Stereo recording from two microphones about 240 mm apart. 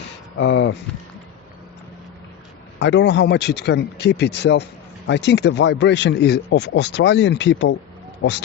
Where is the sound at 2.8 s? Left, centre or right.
Left.